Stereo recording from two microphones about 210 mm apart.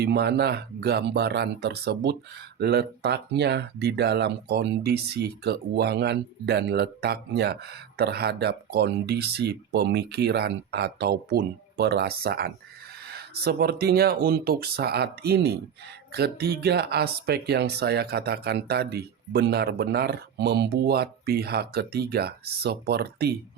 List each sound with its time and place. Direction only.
0.0 s speech: 50° right (ahead or behind)